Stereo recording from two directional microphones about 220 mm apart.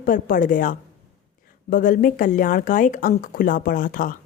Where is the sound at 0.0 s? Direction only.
40° left (ahead or behind).